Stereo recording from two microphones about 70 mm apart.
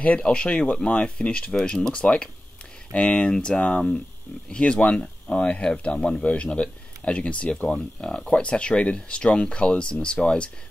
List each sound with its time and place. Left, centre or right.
0.0 s speech: centre